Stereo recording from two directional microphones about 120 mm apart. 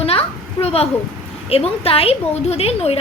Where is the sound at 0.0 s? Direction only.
55° left (ahead or behind).